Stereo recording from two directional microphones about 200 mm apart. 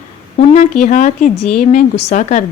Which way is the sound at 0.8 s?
40° left (ahead or behind).